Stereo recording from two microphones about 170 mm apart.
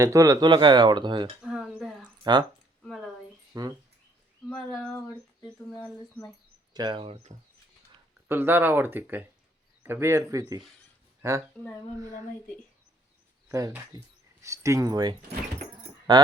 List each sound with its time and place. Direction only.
0.0 s speech: 20° right (ahead or behind)
1.4 s a sound: 5° right (ahead or behind)
2.3 s speech: 25° right (ahead or behind)
2.8 s a sound: centre (ahead or behind)
3.5 s speech: 20° right (ahead or behind)
4.4 s speech: 5° left (ahead or behind)
6.7 s speech: 25° right (ahead or behind)
8.3 s speech: 10° right (ahead or behind)
13.5 s speech: 20° right (ahead or behind)